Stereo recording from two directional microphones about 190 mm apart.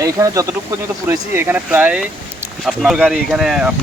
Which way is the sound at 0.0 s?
20° right (ahead or behind).